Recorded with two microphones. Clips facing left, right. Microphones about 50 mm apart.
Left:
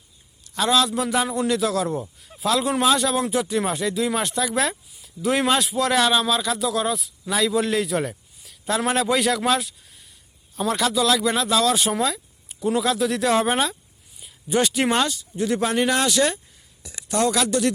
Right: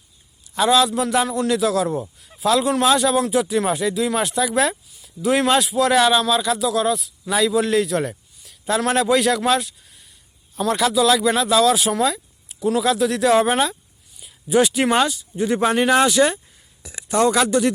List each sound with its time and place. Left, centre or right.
0.5 s speech: centre; by 17.7 s right